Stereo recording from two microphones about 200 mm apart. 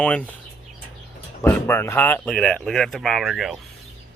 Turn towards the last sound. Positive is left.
turn(degrees=0)  # may be behind; listen again after turning